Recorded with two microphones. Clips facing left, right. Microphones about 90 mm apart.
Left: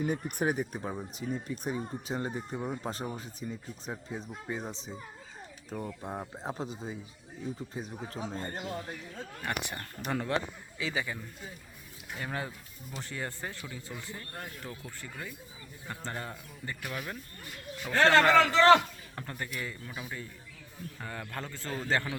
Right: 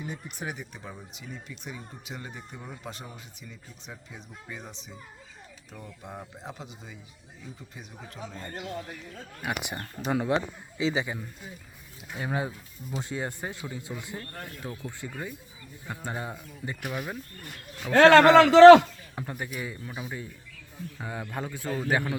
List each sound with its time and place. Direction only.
0.0 s speech: 50° left (ahead or behind); by 8.4 s 30° left (ahead or behind)
9.1 s speech: 10° right (ahead or behind)
17.9 s a man's voice: 90° right
19.1 s speech: 10° right (ahead or behind)